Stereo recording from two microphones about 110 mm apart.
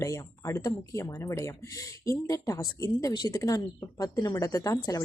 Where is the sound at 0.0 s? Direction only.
25° left (ahead or behind).